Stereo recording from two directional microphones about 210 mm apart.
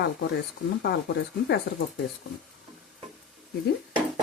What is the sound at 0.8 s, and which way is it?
Speech, 50° left (ahead or behind).